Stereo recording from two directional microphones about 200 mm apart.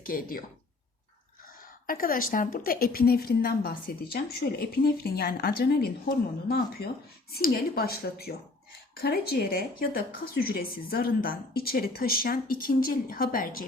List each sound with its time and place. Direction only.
0.0 s speech: 45° left (ahead or behind)
1.9 s speech: 45° left (ahead or behind)
6.8 s speech: 55° left (ahead or behind)